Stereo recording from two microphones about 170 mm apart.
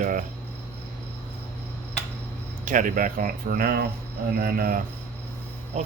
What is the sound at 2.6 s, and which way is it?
Speech, 50° right (ahead or behind).